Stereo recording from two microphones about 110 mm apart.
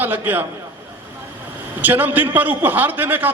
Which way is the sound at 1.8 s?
15° right (ahead or behind).